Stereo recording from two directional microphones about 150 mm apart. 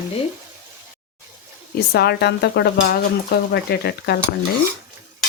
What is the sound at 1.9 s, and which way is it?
Speech, 90° left.